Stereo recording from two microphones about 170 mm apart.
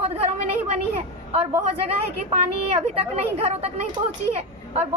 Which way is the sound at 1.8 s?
35° right (ahead or behind).